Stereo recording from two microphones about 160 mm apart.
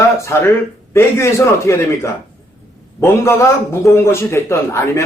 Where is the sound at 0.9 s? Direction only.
15° left (ahead or behind).